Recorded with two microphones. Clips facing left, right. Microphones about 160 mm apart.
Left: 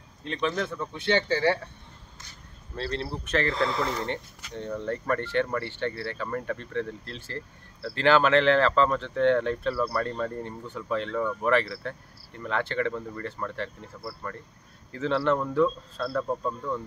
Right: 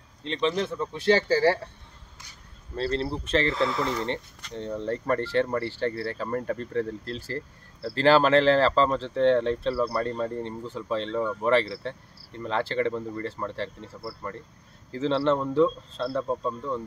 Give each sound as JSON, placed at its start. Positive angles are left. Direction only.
{"t": 0.2, "sound": "speech", "side_deg": -25}
{"t": 3.3, "sound": "speech", "side_deg": -30}
{"t": 3.5, "sound": "speech", "side_deg": -5}
{"t": 4.6, "sound": "speech", "side_deg": -30}